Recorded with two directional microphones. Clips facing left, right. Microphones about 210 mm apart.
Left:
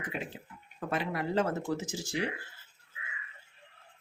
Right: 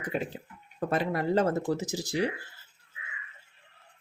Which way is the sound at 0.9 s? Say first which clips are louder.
Right 5 dB; 40° right (ahead or behind).